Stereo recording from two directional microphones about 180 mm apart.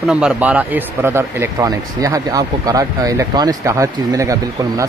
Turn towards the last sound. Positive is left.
turn(degrees=-15)  # may be behind; listen again after turning